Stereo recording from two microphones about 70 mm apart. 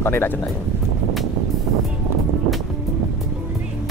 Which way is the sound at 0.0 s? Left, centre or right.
Left.